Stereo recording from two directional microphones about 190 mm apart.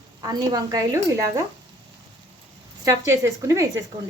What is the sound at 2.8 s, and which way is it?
Speech, 15° right (ahead or behind).